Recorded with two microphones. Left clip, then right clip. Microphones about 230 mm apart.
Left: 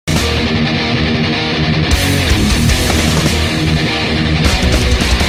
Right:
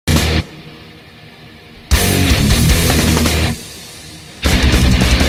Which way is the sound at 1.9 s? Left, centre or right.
Centre.